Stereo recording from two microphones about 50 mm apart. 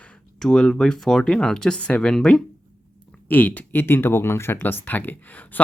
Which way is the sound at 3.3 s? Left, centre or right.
Left.